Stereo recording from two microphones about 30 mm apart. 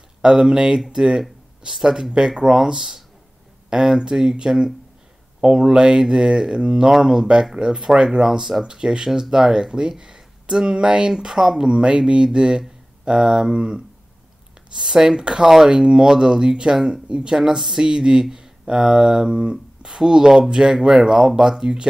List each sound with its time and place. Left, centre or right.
0.5 s speech: right
0.8 s speech: centre
2.1 s speech: right
5.4 s speech: right
8.9 s speech: right
10.8 s speech: right
11.7 s speech: right
13.1 s speech: centre
13.5 s speech: right
14.8 s speech: right
20.9 s speech: centre